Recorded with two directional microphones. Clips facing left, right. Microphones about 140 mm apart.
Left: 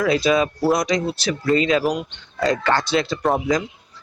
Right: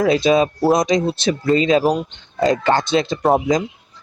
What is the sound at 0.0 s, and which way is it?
Speech, 25° right (ahead or behind).